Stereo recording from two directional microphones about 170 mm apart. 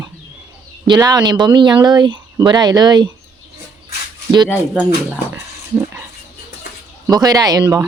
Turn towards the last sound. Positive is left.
turn(degrees=-20)  # may be behind; listen again after turning